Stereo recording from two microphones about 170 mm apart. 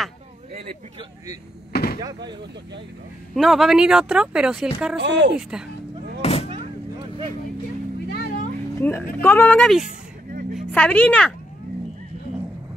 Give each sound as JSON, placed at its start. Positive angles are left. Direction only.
{"t": 0.5, "sound": "speech", "side_deg": -35}
{"t": 1.7, "sound": "a sound", "side_deg": 65}
{"t": 3.3, "sound": "speech", "side_deg": 0}
{"t": 5.0, "sound": "speech", "side_deg": -90}
{"t": 5.3, "sound": "speech", "side_deg": -5}
{"t": 6.2, "sound": "a sound", "side_deg": 40}
{"t": 8.7, "sound": "a woman's voice", "side_deg": 15}